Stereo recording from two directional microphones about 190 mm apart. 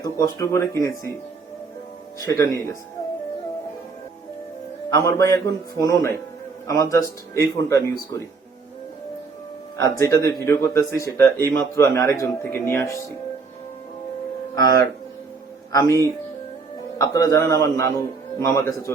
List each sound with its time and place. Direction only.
0.0 s a man's voice: 15° left (ahead or behind)
2.1 s a man's voice: 20° left (ahead or behind)
4.9 s a man's voice: 20° left (ahead or behind)
9.7 s a man's voice: 15° left (ahead or behind)
14.5 s a man's voice: 20° left (ahead or behind)